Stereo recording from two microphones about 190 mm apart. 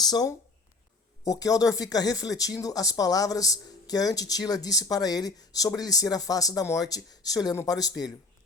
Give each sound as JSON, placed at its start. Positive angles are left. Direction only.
{"t": 0.0, "sound": "speech", "side_deg": 20}